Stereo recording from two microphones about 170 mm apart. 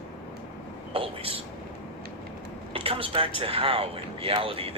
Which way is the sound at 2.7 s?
35° right (ahead or behind).